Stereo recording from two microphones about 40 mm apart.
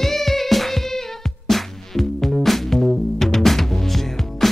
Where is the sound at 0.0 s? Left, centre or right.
Centre.